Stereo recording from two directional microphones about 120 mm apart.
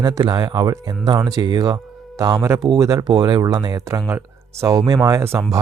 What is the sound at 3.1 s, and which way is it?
Speech, 40° right (ahead or behind).